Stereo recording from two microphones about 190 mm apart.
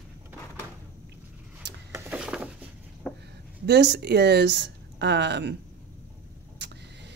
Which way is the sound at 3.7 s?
60° right (ahead or behind).